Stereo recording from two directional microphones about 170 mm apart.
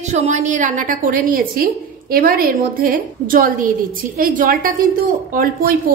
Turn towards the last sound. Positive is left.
turn(degrees=-55)  # may be behind; listen again after turning